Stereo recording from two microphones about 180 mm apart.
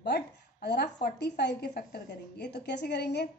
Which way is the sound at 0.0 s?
65° left (ahead or behind).